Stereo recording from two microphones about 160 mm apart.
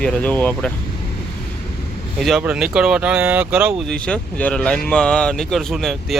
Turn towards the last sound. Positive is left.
turn(degrees=0)  # may be behind; listen again after turning